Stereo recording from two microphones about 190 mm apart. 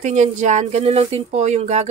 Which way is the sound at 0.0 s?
40° right (ahead or behind).